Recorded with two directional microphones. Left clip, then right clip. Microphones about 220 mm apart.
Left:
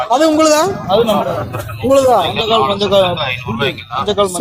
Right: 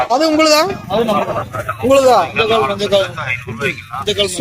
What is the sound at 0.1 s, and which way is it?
Speech, 5° right (ahead or behind).